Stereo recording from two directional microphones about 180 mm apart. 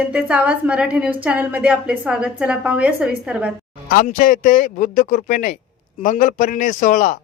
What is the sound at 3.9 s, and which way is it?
Speech, 50° left (ahead or behind).